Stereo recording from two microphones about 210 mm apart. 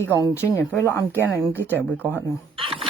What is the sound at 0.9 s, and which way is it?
Speech, 10° right (ahead or behind).